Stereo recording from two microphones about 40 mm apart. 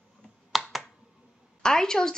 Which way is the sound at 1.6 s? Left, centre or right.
Centre.